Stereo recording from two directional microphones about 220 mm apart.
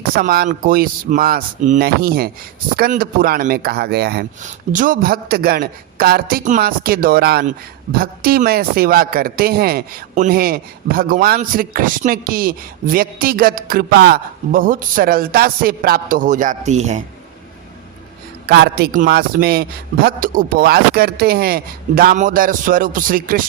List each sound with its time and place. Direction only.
0.0 s a man's voice: 40° right (ahead or behind)
18.4 s a man's voice: 45° right (ahead or behind)